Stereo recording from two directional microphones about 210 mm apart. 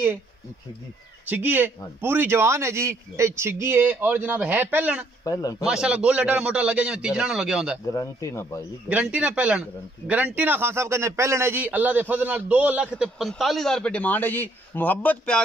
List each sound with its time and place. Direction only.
1.2 s a man's voice: 10° right (ahead or behind)
5.2 s speech: 15° left (ahead or behind)
5.7 s a man's voice: 5° right (ahead or behind)
7.8 s speech: 15° left (ahead or behind)
8.8 s a man's voice: 5° right (ahead or behind)